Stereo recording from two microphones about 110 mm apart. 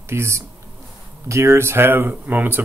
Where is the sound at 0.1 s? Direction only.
25° right (ahead or behind).